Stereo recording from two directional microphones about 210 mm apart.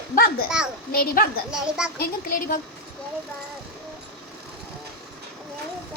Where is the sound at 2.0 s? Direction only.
40° left (ahead or behind).